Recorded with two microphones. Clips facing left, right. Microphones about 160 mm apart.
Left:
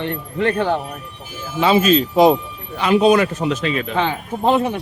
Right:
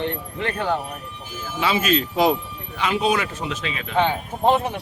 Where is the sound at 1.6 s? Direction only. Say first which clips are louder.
Left 7 dB; 25° left (ahead or behind).